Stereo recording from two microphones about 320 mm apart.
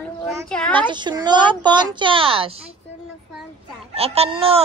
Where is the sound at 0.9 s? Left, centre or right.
Centre.